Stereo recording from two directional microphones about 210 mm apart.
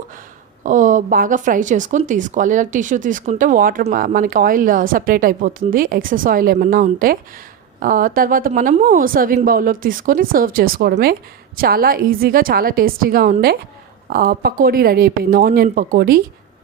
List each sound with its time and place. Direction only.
0.6 s a woman's voice: 40° right (ahead or behind)